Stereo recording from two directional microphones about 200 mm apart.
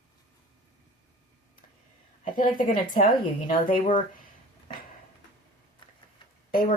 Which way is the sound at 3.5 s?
25° left (ahead or behind).